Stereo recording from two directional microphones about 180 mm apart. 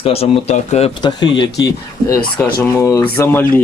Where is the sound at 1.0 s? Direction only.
25° left (ahead or behind).